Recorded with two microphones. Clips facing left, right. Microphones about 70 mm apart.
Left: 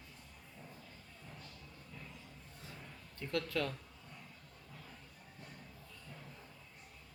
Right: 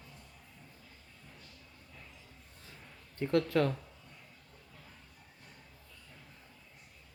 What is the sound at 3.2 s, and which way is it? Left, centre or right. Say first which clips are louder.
Speech: right 10 dB; right.